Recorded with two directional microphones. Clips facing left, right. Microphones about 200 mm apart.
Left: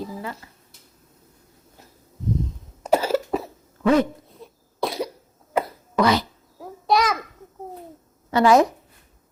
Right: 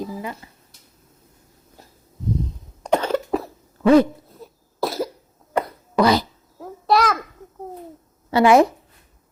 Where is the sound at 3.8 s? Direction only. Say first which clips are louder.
Right 5 dB; 35° right (ahead or behind).